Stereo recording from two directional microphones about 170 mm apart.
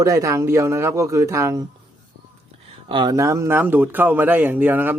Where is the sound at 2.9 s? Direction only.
25° right (ahead or behind).